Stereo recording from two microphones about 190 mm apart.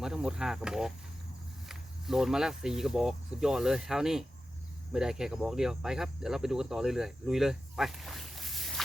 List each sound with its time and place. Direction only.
0.0 s cricket: 5° right (ahead or behind)
1.6 s speech: centre (ahead or behind)
4.9 s cricket: 5° right (ahead or behind)